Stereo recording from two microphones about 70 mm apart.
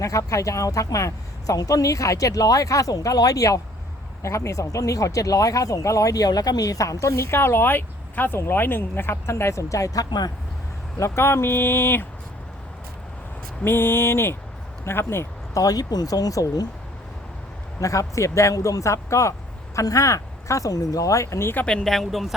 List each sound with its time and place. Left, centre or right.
0.0 s speech: left
4.2 s speech: left
11.0 s speech: left
13.7 s speech: left
15.5 s speech: left
17.7 s speech: left
21.8 s speech: centre